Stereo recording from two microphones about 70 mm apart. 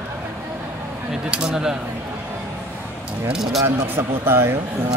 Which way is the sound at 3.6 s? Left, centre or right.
Right.